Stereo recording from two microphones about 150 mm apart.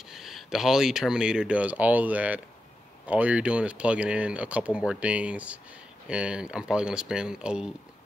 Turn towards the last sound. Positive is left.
turn(degrees=-5)  # may be behind; listen again after turning